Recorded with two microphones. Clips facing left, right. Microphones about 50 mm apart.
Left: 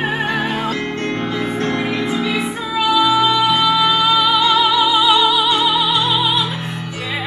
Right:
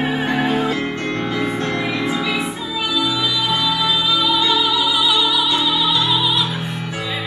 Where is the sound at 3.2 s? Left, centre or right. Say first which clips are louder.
Left 6 dB; left.